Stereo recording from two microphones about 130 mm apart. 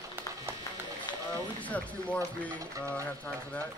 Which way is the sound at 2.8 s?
10° left (ahead or behind).